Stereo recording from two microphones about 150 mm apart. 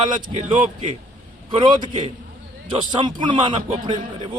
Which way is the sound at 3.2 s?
35° right (ahead or behind).